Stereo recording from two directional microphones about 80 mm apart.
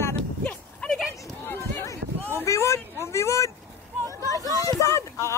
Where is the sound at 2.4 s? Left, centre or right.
Left.